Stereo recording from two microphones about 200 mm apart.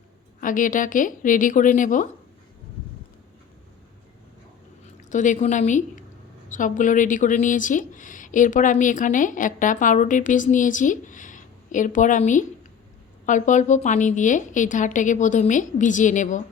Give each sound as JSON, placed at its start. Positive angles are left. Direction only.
{"t": 0.4, "sound": "speech", "side_deg": 40}
{"t": 5.1, "sound": "speech", "side_deg": 40}